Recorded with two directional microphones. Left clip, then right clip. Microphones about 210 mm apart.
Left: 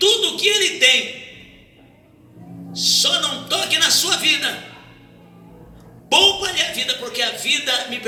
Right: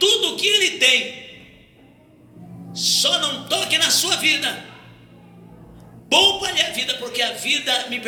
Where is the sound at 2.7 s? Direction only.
15° right (ahead or behind).